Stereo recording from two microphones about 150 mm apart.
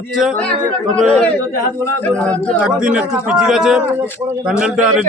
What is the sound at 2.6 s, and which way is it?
A man's voice, 5° right (ahead or behind).